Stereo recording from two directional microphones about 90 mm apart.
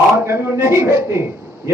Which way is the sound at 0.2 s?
25° right (ahead or behind).